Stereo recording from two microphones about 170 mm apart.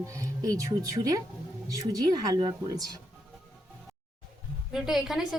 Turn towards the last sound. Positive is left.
turn(degrees=0)  # may be behind; listen again after turning